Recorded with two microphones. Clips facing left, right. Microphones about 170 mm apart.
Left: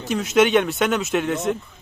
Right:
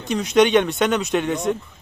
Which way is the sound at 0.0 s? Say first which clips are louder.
Right 1 dB; centre (ahead or behind).